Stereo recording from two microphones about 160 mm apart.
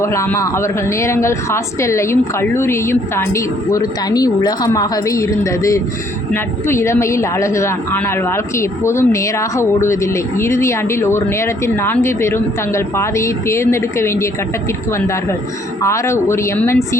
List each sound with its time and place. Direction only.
0.0 s speech: 15° left (ahead or behind)
15.8 s speech: 15° left (ahead or behind)